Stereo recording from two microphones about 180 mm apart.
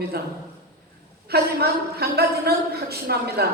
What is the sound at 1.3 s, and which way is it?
A woman's voice, 65° right (ahead or behind).